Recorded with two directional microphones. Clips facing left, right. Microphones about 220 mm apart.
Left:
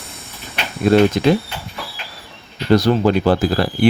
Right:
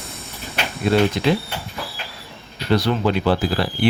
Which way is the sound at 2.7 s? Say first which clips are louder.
Left 5 dB; 45° left (ahead or behind).